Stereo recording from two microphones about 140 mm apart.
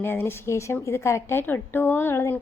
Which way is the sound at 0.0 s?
15° left (ahead or behind).